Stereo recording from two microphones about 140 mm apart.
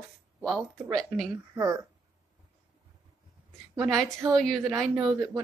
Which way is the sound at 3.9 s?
Centre (ahead or behind).